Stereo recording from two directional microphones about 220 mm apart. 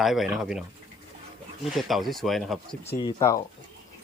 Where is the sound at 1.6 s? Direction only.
Centre (ahead or behind).